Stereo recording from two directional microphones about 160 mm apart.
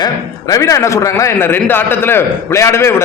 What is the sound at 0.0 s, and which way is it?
A man's voice, 20° left (ahead or behind).